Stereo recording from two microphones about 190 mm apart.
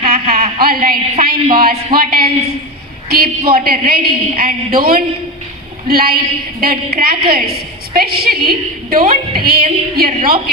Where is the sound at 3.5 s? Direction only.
50° right (ahead or behind).